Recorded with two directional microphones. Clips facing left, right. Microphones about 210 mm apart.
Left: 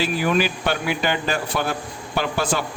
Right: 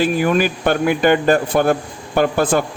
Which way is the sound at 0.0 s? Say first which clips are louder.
Right 5 dB; 50° right (ahead or behind).